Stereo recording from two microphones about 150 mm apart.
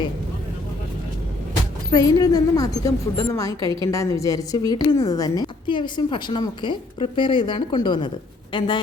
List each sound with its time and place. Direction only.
1.9 s a woman's voice: 25° left (ahead or behind)